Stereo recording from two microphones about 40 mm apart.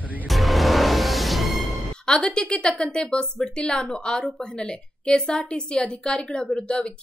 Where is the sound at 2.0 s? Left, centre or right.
Centre.